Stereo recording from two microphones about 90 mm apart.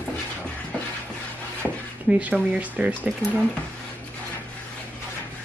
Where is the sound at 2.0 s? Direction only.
15° right (ahead or behind).